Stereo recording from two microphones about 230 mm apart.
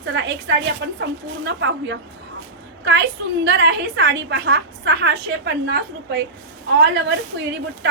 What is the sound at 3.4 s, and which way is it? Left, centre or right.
A woman's voice, right.